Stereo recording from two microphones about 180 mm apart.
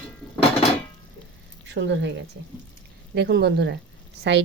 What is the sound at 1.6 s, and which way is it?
Speech, 75° right (ahead or behind).